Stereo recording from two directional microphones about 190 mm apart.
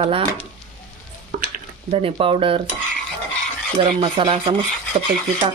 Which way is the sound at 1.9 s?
30° right (ahead or behind).